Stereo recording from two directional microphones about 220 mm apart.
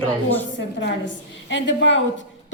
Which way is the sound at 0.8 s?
55° left (ahead or behind).